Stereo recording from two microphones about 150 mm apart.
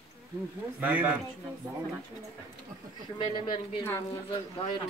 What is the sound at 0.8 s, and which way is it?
Speech, 10° right (ahead or behind).